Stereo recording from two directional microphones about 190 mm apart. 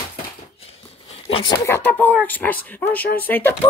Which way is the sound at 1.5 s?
10° left (ahead or behind).